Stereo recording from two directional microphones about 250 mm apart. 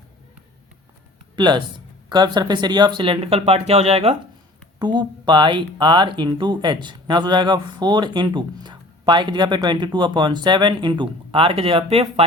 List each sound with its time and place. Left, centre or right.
1.4 s speech: centre